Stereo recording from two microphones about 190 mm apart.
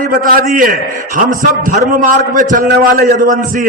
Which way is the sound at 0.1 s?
45° right (ahead or behind).